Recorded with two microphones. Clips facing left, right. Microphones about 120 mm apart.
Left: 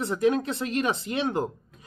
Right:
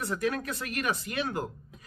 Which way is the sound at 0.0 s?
25° left (ahead or behind).